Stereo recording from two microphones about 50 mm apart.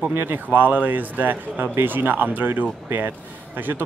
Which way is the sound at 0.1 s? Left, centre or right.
Right.